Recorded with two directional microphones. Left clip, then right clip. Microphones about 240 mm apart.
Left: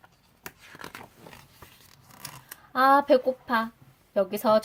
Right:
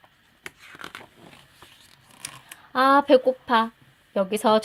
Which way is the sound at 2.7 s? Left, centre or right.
Right.